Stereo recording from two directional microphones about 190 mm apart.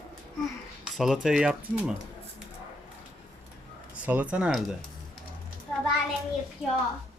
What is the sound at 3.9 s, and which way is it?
Speech, 5° right (ahead or behind).